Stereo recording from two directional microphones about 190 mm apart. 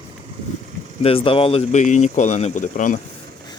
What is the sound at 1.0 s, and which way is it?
Speech, 30° left (ahead or behind).